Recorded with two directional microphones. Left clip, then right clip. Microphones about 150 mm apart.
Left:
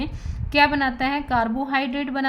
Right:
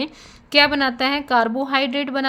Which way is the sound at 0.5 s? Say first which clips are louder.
Right 2 dB; 50° right (ahead or behind).